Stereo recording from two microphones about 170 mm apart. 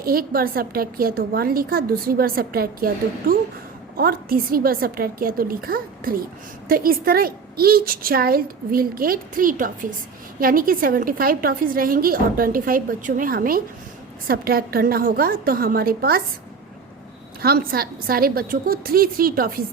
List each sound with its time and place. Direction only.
0.0 s a woman's voice: 60° right (ahead or behind)
17.4 s a woman's voice: 60° right (ahead or behind)